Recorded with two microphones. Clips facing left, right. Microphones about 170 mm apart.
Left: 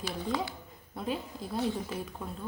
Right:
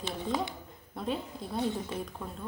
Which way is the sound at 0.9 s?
Centre (ahead or behind).